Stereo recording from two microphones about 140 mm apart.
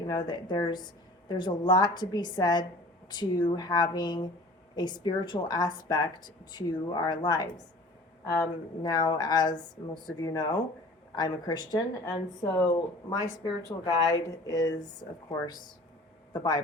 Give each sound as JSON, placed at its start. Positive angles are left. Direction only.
{"t": 0.1, "sound": "a woman's voice", "side_deg": 30}
{"t": 8.8, "sound": "a woman's voice", "side_deg": 30}
{"t": 16.3, "sound": "a woman's voice", "side_deg": 30}